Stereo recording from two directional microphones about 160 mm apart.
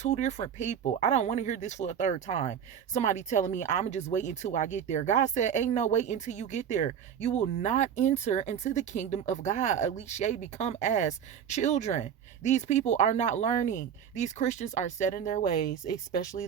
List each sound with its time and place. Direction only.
0.0 s speech: 45° left (ahead or behind)